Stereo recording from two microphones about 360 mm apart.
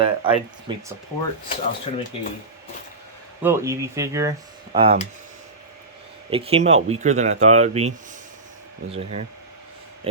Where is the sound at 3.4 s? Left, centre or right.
Centre.